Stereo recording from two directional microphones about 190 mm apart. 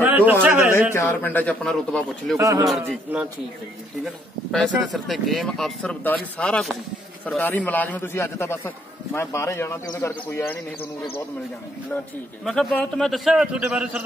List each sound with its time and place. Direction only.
0.0 s speech: 10° right (ahead or behind)
0.9 s a man's voice: 10° left (ahead or behind)
2.3 s speech: 15° right (ahead or behind)
2.9 s a man's voice: 5° right (ahead or behind); by 11.2 s 15° left (ahead or behind)
12.4 s speech: 5° left (ahead or behind)